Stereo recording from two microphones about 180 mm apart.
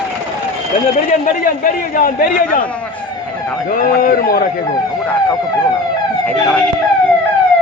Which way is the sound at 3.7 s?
50° left (ahead or behind).